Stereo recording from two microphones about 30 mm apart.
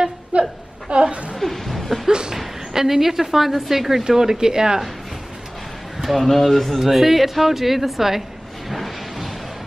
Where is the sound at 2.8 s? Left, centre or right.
Centre.